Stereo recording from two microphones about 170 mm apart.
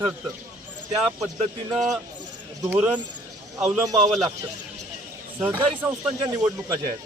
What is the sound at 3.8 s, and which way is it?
Speech, 20° right (ahead or behind).